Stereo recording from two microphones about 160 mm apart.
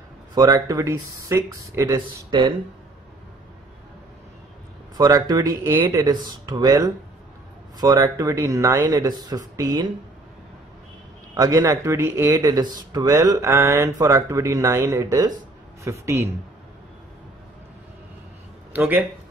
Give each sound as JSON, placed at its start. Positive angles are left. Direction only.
{"t": 0.3, "sound": "speech", "side_deg": -25}
{"t": 4.9, "sound": "speech", "side_deg": -25}
{"t": 11.3, "sound": "a man's voice", "side_deg": -20}
{"t": 18.7, "sound": "speech", "side_deg": -10}